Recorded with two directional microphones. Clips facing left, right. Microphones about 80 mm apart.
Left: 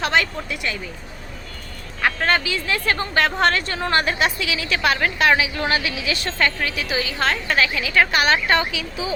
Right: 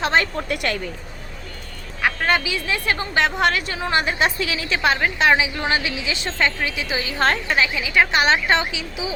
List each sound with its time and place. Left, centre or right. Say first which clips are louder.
0.0 s a woman's voice: right 1 dB; right
0.4 s speech: right 4 dB; right
2.0 s speech: even; centre
4.2 s a woman's voice: right 1 dB; right; by 9.1 s centre